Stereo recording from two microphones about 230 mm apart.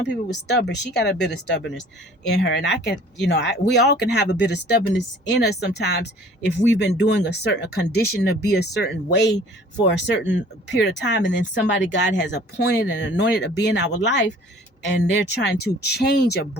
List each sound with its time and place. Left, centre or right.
0.1 s speech: left